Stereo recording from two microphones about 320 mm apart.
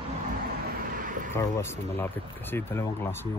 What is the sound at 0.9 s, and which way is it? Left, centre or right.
Vehicle, right.